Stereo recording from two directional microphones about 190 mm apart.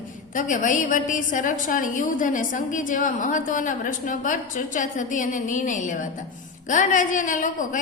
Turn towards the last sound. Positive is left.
turn(degrees=45)  # may be behind; listen again after turning